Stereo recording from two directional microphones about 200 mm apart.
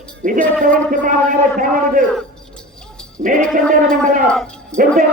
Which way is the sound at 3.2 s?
35° right (ahead or behind).